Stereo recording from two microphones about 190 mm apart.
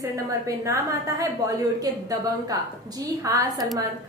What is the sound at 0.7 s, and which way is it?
A woman's voice, 15° right (ahead or behind).